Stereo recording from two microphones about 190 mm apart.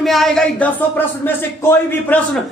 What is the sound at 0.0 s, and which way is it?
Speech, centre (ahead or behind).